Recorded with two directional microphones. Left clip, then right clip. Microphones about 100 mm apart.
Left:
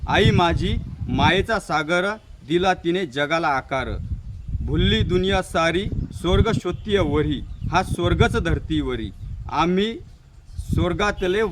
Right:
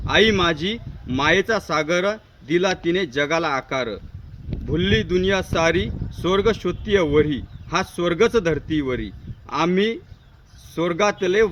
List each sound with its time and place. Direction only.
0.0 s speech: 30° left (ahead or behind)